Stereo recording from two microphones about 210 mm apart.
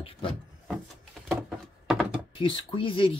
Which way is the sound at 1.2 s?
5° right (ahead or behind).